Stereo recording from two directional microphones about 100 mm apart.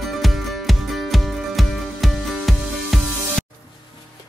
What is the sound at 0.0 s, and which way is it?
Music, centre (ahead or behind).